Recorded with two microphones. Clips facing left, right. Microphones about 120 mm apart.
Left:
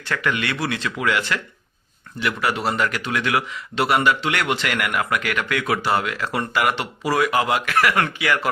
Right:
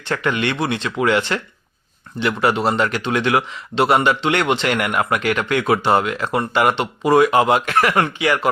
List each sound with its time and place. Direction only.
0.0 s speech: 30° right (ahead or behind)